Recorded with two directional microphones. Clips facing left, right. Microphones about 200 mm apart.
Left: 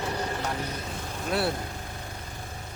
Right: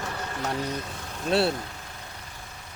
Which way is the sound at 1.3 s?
30° right (ahead or behind).